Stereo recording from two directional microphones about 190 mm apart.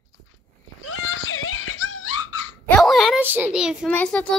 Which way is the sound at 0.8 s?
90° left.